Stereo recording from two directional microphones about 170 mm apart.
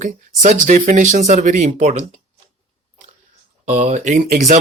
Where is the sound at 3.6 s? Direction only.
40° right (ahead or behind).